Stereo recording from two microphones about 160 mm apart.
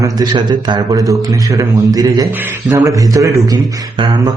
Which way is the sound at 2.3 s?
10° right (ahead or behind).